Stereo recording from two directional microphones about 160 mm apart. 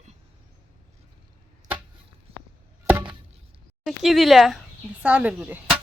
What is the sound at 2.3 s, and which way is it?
Chop, 40° right (ahead or behind).